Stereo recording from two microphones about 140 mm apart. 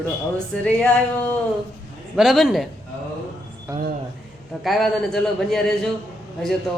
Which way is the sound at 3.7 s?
20° right (ahead or behind).